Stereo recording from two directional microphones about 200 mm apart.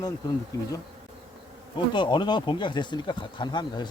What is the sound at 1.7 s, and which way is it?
Speech, 25° left (ahead or behind).